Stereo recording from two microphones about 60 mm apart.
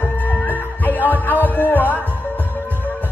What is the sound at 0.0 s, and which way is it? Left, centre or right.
Music, left.